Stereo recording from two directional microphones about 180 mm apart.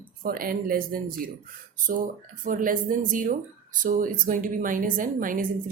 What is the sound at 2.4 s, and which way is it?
Speech, 50° right (ahead or behind).